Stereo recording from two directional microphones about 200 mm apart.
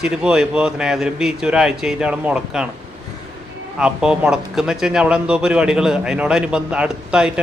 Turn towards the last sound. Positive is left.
turn(degrees=-5)  # may be behind; listen again after turning